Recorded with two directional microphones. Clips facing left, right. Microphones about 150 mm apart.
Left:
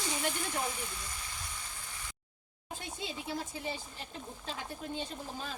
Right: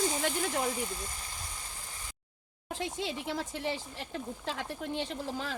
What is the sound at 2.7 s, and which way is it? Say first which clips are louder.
Speech: right 6 dB; 90° right.